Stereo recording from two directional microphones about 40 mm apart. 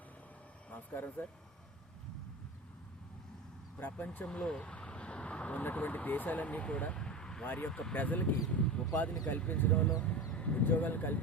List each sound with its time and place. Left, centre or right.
0.7 s speech: left
3.8 s speech: left
4.3 s vehicle: left
5.6 s speech: left
6.9 s vehicle: centre
7.4 s speech: left
7.7 s speech: centre
7.9 s speech: left
9.7 s speech: left
10.3 s a sound: left
10.6 s speech: left